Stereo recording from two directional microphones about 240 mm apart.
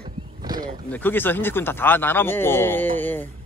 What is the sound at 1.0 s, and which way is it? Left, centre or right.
Speech, centre.